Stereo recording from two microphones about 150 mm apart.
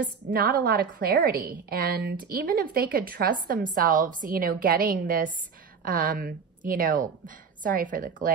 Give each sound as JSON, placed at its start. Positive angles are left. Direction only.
{"t": 0.0, "sound": "a woman's voice", "side_deg": -65}